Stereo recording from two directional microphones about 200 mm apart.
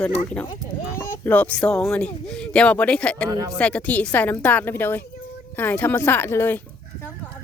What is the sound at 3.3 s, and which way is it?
Speech, 15° right (ahead or behind).